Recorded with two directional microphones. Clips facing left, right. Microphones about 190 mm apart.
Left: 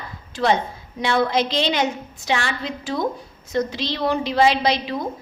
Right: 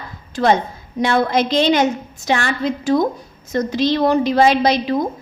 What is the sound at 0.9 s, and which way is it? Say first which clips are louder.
A woman's voice: right 3 dB; 45° right (ahead or behind).